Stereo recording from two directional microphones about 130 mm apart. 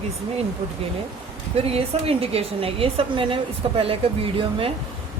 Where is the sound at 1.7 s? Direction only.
50° right (ahead or behind).